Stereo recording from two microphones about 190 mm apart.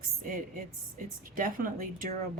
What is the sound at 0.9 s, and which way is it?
Speech, 45° right (ahead or behind).